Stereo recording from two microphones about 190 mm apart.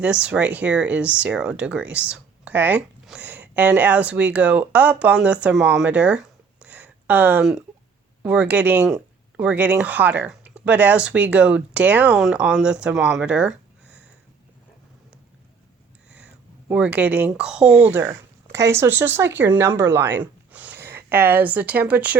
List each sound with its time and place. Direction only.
0.0 s speech: 5° right (ahead or behind)
16.0 s speech: 5° right (ahead or behind)